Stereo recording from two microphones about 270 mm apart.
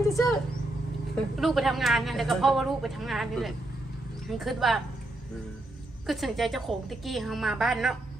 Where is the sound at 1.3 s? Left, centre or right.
Centre.